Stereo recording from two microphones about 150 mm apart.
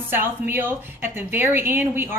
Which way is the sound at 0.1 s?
15° right (ahead or behind).